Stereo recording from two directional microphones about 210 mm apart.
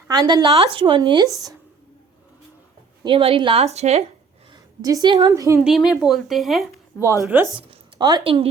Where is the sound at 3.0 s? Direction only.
25° right (ahead or behind).